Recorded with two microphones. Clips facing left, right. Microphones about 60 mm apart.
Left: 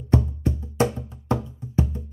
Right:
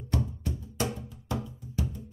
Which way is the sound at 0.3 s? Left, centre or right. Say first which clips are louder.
Left 9 dB; left.